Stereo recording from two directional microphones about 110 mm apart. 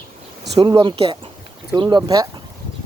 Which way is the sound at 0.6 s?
50° right (ahead or behind).